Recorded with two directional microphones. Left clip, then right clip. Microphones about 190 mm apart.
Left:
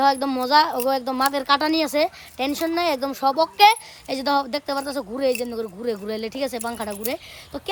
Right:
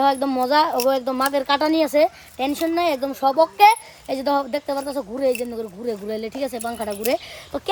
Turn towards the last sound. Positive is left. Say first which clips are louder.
# right 5 dB
turn(degrees=-10)  # may be behind; listen again after turning